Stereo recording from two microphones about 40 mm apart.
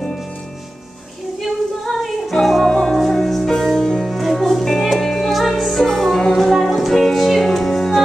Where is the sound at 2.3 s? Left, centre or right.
Centre.